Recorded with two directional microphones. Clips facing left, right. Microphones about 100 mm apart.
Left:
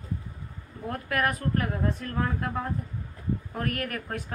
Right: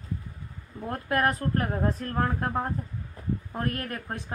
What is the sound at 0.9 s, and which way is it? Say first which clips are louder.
A woman's voice: right 2 dB; 30° right (ahead or behind).